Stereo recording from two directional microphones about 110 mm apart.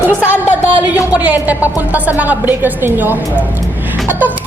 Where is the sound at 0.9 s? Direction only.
15° right (ahead or behind).